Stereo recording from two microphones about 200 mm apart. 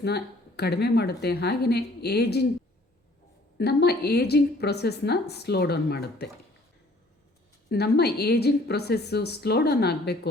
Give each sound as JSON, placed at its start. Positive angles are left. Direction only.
{"t": 0.0, "sound": "a woman's voice", "side_deg": 55}
{"t": 3.6, "sound": "a woman's voice", "side_deg": 55}
{"t": 7.7, "sound": "a woman's voice", "side_deg": 55}